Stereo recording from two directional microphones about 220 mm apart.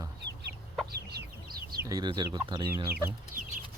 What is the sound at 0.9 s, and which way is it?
Chicken, 45° right (ahead or behind).